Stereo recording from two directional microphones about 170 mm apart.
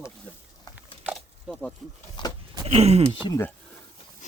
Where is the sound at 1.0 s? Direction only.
10° right (ahead or behind).